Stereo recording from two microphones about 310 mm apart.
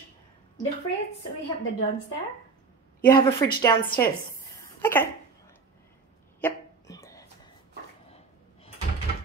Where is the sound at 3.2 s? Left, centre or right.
Centre.